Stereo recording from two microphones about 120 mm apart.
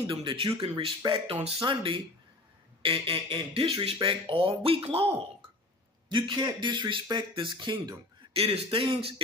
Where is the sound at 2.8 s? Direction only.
50° right (ahead or behind).